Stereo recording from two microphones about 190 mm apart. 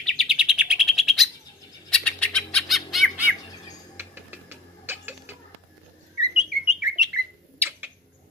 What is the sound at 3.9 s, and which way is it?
Cat, 10° right (ahead or behind).